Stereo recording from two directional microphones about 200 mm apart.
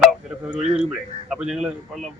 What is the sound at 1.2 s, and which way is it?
Speech, 5° right (ahead or behind).